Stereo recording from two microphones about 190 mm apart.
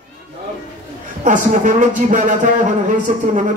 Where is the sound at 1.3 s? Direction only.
40° right (ahead or behind).